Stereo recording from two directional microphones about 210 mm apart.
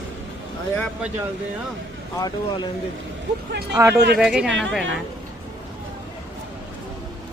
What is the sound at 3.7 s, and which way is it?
Speech, 15° right (ahead or behind).